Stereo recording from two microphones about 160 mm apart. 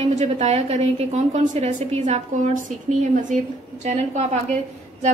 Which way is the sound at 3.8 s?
45° right (ahead or behind).